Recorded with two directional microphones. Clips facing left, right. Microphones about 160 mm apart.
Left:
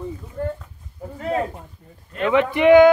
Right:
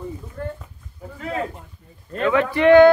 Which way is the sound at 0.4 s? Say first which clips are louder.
Left 4 dB; 25° left (ahead or behind).